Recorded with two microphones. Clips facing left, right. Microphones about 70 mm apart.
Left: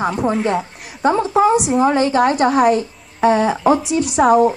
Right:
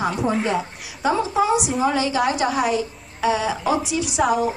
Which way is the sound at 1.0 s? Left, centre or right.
Left.